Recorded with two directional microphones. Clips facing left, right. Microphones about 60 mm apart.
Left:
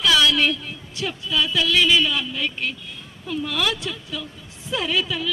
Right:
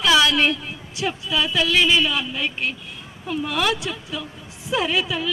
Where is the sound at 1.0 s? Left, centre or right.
Right.